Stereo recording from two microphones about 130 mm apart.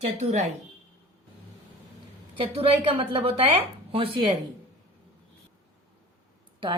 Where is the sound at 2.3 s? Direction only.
40° right (ahead or behind).